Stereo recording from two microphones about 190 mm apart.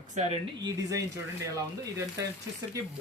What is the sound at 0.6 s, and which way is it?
Speech, 15° right (ahead or behind).